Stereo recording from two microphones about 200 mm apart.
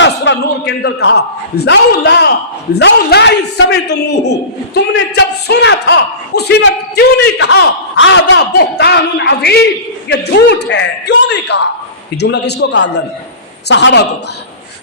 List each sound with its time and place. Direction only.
0.0 s a man's voice: 60° left (ahead or behind)